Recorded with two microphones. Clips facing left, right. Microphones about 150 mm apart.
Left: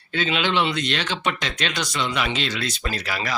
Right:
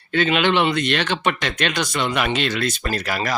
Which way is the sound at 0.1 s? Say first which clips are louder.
Right 5 dB; 55° right (ahead or behind).